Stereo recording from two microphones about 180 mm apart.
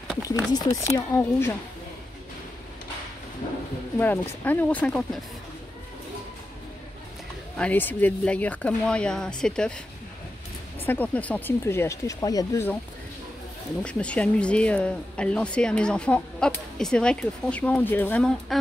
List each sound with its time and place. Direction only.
0.5 s speech: 20° left (ahead or behind)
4.0 s speech: 10° left (ahead or behind)
7.5 s speech: 10° left (ahead or behind)
10.9 s speech: 10° left (ahead or behind)
13.8 s speech: 5° left (ahead or behind)